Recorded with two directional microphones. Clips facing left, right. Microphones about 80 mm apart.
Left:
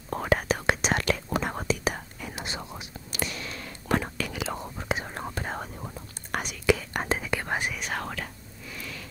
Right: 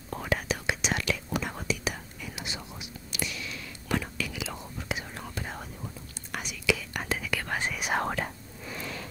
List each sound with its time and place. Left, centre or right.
0.1 s whispering: left
7.9 s whispering: right